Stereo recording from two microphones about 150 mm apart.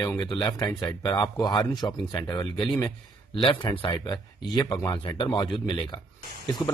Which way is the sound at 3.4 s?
35° left (ahead or behind).